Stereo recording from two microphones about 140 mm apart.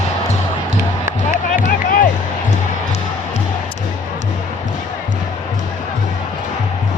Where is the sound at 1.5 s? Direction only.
75° left (ahead or behind).